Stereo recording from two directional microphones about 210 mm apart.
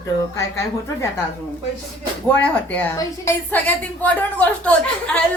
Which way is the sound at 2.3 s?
5° left (ahead or behind).